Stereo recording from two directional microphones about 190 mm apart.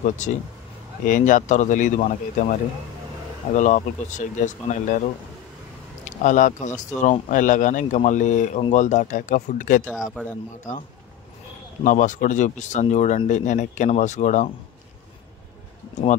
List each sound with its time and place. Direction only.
0.0 s speech: 40° left (ahead or behind)
3.4 s speech: 40° left (ahead or behind)